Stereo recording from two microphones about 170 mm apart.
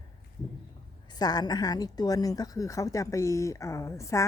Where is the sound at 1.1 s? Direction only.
25° left (ahead or behind).